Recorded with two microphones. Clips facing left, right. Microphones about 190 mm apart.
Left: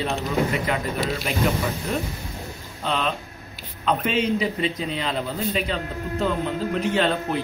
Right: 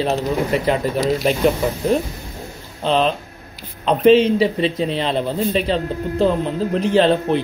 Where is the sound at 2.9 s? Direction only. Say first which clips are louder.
Right 8 dB; 30° right (ahead or behind).